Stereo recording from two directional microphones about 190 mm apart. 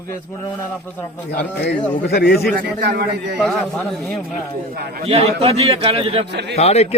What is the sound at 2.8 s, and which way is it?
Speech, 55° right (ahead or behind).